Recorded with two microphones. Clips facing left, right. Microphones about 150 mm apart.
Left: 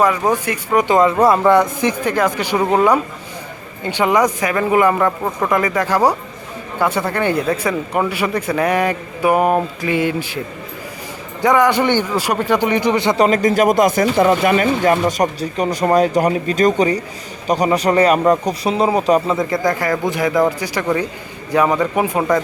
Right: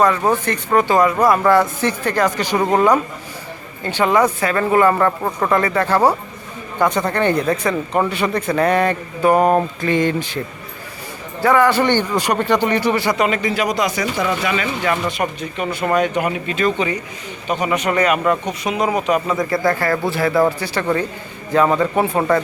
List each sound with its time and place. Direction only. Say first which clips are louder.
0.0 s speech: even; 10° left (ahead or behind)
11.4 s speech: even; 15° left (ahead or behind)
13.1 s speech: left 5 dB; 40° left (ahead or behind); by 22.2 s 15° left (ahead or behind)